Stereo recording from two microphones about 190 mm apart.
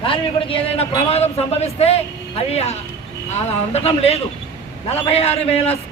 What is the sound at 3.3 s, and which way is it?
A man's voice, 35° left (ahead or behind).